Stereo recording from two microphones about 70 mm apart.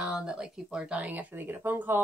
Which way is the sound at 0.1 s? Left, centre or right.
Centre.